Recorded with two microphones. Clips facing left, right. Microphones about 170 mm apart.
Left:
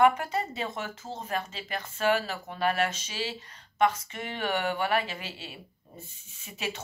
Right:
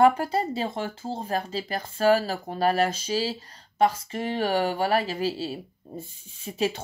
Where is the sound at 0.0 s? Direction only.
35° right (ahead or behind).